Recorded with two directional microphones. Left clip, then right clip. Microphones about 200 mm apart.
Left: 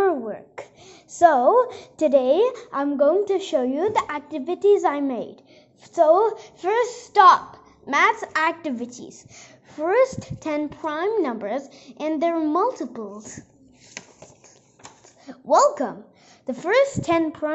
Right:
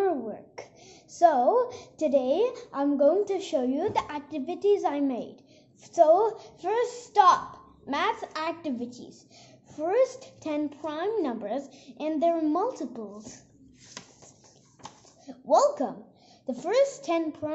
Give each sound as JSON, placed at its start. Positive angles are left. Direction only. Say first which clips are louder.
{"t": 0.0, "sound": "a sound", "louder": "left 6 dB", "side_deg": 15}
{"t": 1.2, "sound": "a woman's voice", "louder": "left 6 dB", "side_deg": 20}
{"t": 15.2, "sound": "a woman's voice", "louder": "left 5 dB", "side_deg": 10}